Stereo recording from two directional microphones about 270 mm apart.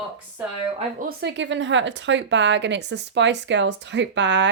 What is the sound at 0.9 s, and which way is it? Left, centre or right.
Speech, right.